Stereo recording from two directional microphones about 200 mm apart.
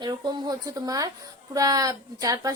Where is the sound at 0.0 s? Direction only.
20° right (ahead or behind).